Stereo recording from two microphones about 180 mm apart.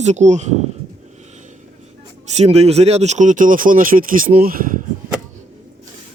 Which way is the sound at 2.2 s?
35° right (ahead or behind).